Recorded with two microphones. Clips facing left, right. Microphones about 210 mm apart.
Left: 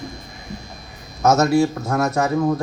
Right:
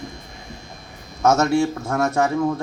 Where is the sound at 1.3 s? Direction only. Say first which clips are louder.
Left 3 dB; 35° left (ahead or behind).